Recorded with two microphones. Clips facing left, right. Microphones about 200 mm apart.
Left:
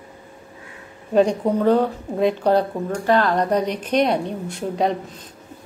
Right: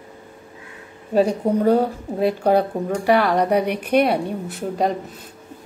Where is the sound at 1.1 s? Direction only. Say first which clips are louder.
Even; 10° right (ahead or behind).